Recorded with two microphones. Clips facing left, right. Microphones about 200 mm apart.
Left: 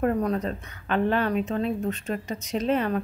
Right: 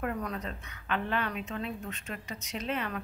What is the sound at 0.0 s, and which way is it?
A woman's voice, 40° left (ahead or behind).